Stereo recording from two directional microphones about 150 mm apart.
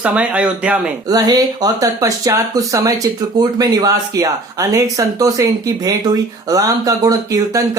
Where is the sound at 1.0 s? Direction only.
25° right (ahead or behind).